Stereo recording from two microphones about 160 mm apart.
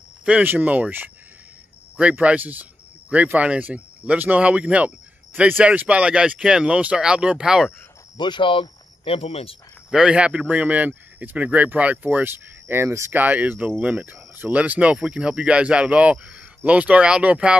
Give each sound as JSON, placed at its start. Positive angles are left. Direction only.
{"t": 0.2, "sound": "speech", "side_deg": -10}
{"t": 8.2, "sound": "speech", "side_deg": 30}
{"t": 9.8, "sound": "speech", "side_deg": -5}